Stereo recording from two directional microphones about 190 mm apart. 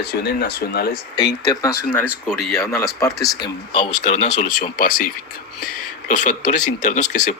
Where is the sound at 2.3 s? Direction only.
Centre (ahead or behind).